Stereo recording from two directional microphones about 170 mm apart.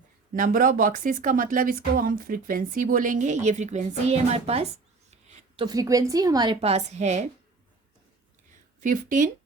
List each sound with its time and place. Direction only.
0.3 s speech: 55° right (ahead or behind)
5.6 s a woman's voice: 20° right (ahead or behind)
6.6 s a woman's voice: 40° right (ahead or behind)
8.8 s speech: 50° right (ahead or behind)